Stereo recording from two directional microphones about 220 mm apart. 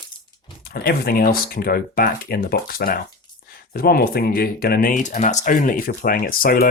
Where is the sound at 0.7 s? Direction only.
45° left (ahead or behind).